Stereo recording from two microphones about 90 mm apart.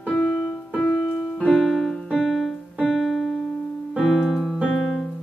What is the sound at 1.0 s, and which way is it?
Music, 5° right (ahead or behind).